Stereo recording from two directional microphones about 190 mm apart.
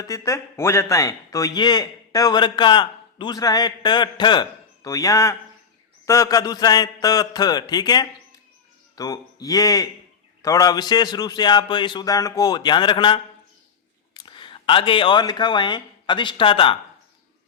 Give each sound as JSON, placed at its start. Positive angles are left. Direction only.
{"t": 0.0, "sound": "a man's voice", "side_deg": 15}